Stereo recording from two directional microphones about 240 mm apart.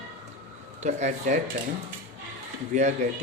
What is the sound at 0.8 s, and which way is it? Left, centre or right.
Speech, right.